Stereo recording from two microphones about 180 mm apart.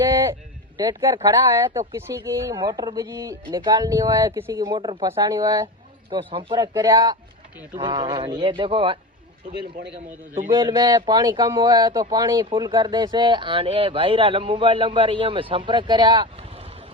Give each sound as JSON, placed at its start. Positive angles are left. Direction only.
{"t": 0.0, "sound": "a sound", "side_deg": -15}
{"t": 0.8, "sound": "speech", "side_deg": -20}
{"t": 10.5, "sound": "speech", "side_deg": -25}